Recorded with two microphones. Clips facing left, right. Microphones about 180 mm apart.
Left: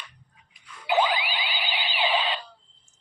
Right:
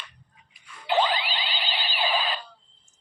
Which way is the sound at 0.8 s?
10° left (ahead or behind).